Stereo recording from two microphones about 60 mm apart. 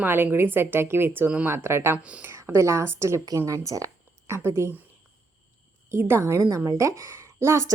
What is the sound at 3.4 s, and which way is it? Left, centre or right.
Speech, right.